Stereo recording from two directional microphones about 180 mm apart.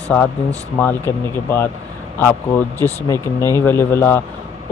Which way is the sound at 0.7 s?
10° left (ahead or behind).